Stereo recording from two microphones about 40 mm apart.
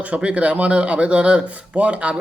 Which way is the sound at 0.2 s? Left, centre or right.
Right.